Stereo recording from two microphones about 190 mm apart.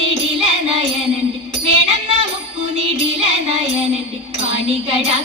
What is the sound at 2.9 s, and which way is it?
Music, 30° right (ahead or behind).